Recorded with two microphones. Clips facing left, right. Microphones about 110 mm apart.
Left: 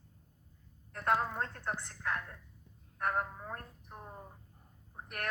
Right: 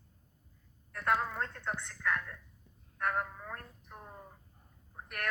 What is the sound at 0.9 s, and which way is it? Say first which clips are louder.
A woman's voice: even; 30° left (ahead or behind).